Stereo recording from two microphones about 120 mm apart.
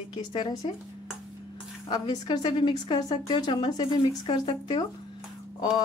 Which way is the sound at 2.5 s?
45° left (ahead or behind).